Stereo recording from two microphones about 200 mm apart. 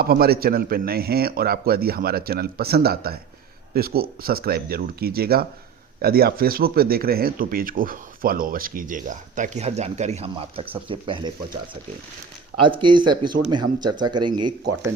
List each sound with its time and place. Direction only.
0.0 s speech: 50° right (ahead or behind); by 11.3 s 25° right (ahead or behind)
12.6 s speech: 25° right (ahead or behind)